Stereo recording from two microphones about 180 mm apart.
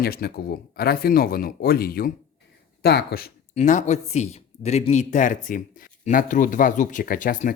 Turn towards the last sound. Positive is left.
turn(degrees=50)  # may be behind; listen again after turning